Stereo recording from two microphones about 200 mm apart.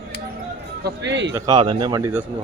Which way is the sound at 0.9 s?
60° right (ahead or behind).